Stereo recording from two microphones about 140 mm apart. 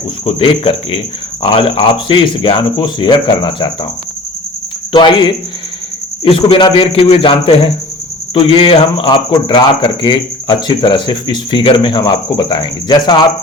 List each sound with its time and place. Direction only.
0.3 s speech: 40° left (ahead or behind)
4.9 s speech: 35° left (ahead or behind)